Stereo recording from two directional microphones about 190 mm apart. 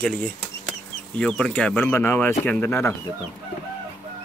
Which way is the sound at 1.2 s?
5° left (ahead or behind).